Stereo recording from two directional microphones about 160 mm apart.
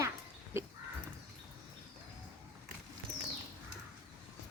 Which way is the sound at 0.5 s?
15° right (ahead or behind).